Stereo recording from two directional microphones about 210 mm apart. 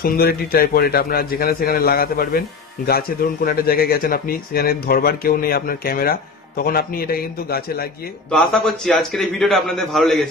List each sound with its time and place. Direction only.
0.0 s a man's voice: 45° left (ahead or behind)
8.3 s a man's voice: centre (ahead or behind)